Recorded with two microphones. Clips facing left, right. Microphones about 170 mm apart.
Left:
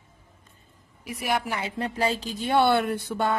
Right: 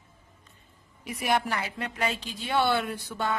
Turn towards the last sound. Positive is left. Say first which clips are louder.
# left 5 dB
turn(degrees=55)  # may be behind; listen again after turning